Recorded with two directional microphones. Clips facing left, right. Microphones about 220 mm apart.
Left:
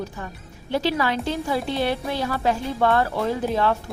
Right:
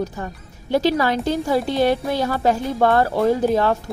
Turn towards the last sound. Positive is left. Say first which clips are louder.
# right 5 dB
turn(degrees=-40)  # may be behind; listen again after turning